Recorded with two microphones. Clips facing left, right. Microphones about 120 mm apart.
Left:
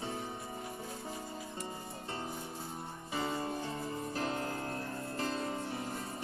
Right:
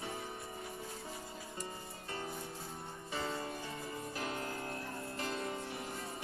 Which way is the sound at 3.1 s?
25° left (ahead or behind).